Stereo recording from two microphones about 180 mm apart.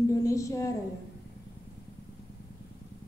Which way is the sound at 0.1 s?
20° left (ahead or behind).